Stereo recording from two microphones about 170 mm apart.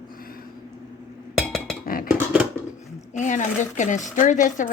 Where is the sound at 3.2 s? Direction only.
45° left (ahead or behind).